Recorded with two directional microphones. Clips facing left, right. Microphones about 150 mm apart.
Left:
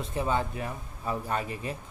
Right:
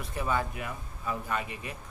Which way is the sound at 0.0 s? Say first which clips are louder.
Left 2 dB; 25° left (ahead or behind).